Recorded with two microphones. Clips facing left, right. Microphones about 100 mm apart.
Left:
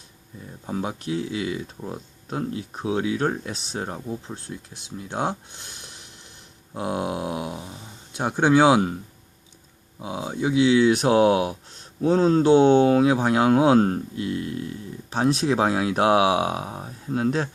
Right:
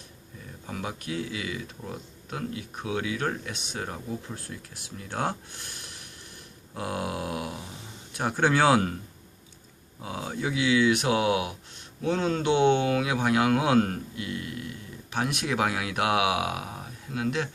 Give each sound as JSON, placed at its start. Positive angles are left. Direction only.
{"t": 0.7, "sound": "speech", "side_deg": 25}
{"t": 10.0, "sound": "speech", "side_deg": 20}